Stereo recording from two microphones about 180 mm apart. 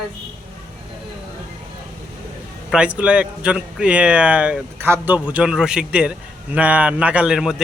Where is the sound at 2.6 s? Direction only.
5° right (ahead or behind).